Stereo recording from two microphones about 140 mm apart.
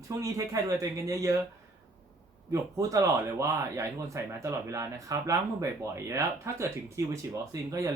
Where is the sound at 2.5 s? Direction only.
25° right (ahead or behind).